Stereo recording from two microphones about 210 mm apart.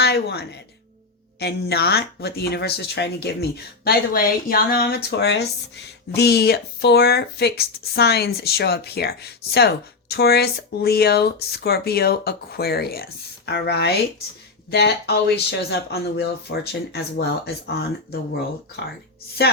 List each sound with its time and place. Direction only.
0.0 s a woman's voice: 50° left (ahead or behind)
19.4 s speech: 50° left (ahead or behind)